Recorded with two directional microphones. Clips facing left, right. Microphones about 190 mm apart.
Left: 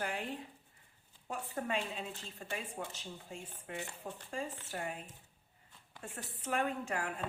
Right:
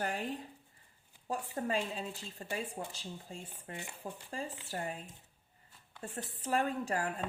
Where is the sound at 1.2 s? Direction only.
35° right (ahead or behind).